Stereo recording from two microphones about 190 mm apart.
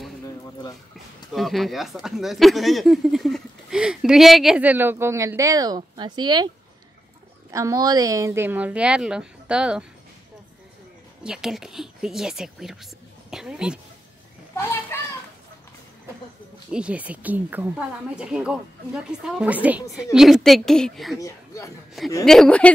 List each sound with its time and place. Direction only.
1.3 s speech: centre (ahead or behind); by 6.5 s 20° right (ahead or behind)
7.5 s speech: 15° right (ahead or behind)
11.2 s speech: 5° right (ahead or behind)
14.5 s children playing: 15° left (ahead or behind)
16.7 s speech: 5° right (ahead or behind)
21.2 s speech: 15° left (ahead or behind)
22.2 s speech: centre (ahead or behind)